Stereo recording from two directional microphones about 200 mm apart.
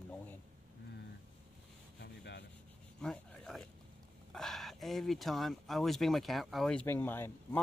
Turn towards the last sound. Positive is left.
turn(degrees=10)  # may be behind; listen again after turning